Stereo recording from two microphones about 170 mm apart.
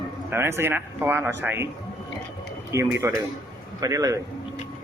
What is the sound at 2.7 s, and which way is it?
A man's voice, 15° right (ahead or behind).